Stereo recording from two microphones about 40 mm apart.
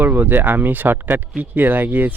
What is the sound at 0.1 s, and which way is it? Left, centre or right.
A man's voice, right.